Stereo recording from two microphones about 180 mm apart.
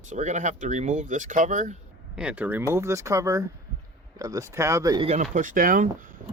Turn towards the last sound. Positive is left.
turn(degrees=-50)  # may be behind; listen again after turning